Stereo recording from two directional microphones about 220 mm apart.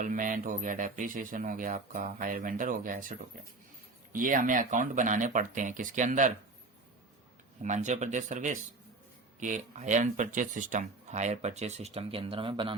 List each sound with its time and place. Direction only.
0.0 s speech: 35° right (ahead or behind)
7.6 s speech: 35° right (ahead or behind)